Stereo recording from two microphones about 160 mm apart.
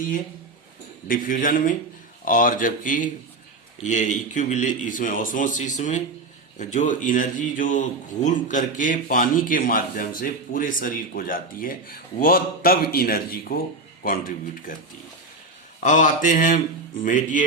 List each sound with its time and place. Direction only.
1.0 s a man's voice: 55° left (ahead or behind)
15.8 s a man's voice: 50° left (ahead or behind)